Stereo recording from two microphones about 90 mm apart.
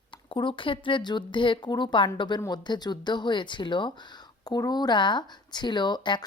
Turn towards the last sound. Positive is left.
turn(degrees=55)  # may be behind; listen again after turning